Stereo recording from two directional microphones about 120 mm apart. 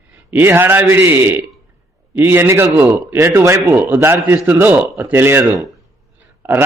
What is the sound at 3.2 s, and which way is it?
A man's voice, 25° right (ahead or behind).